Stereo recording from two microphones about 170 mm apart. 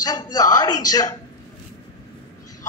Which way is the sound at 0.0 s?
20° left (ahead or behind).